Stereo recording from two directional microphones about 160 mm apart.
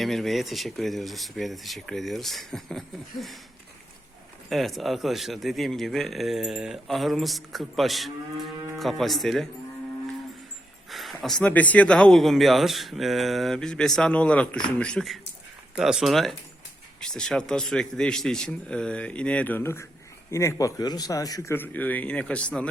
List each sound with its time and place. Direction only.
0.0 s speech: centre (ahead or behind)
4.4 s speech: centre (ahead or behind)
10.8 s a man's voice: centre (ahead or behind)